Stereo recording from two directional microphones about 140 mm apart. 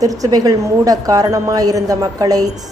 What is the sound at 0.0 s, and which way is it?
Speech, 25° right (ahead or behind).